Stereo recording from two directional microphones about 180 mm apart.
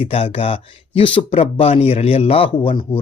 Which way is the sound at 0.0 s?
30° left (ahead or behind).